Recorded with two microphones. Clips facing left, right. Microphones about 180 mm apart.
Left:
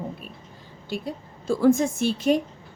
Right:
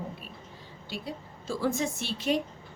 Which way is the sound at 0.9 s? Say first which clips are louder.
Left 7 dB; 50° left (ahead or behind).